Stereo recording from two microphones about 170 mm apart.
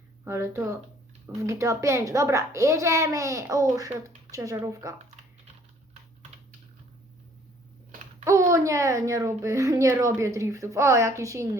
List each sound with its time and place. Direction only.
0.3 s a woman's voice: 15° right (ahead or behind)
8.2 s a woman's voice: 15° right (ahead or behind)